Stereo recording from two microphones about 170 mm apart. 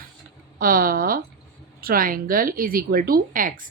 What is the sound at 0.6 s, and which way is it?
Speech, 55° right (ahead or behind).